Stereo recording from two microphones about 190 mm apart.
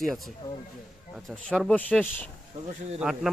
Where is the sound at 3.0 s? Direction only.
5° right (ahead or behind).